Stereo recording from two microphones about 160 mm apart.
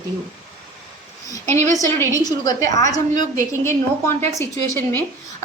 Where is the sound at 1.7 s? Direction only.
20° left (ahead or behind).